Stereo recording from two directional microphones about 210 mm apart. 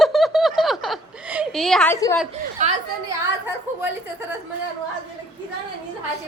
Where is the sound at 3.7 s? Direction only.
10° right (ahead or behind).